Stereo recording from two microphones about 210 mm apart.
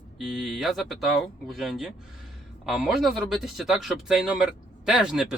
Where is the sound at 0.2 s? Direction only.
Centre (ahead or behind).